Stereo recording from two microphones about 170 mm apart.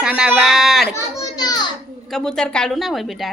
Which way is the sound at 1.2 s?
25° left (ahead or behind).